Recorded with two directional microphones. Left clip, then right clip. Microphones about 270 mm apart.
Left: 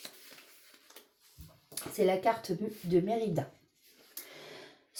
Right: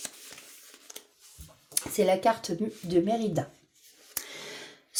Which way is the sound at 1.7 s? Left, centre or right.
Right.